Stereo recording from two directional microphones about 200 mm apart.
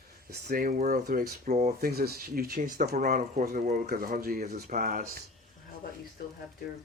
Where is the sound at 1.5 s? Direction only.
35° right (ahead or behind).